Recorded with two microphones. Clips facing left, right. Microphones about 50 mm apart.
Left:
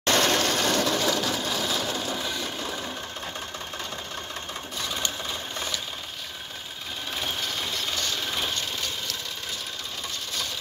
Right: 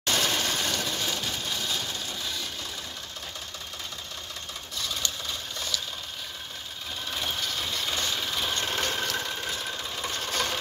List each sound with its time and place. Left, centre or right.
0.0 s sewing machine: left
4.7 s a sound: left
7.1 s engine: centre
7.9 s engine: centre
8.5 s vehicle: right
10.3 s a sound: right